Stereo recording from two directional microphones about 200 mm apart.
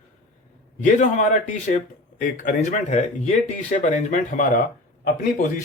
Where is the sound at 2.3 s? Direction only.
40° left (ahead or behind).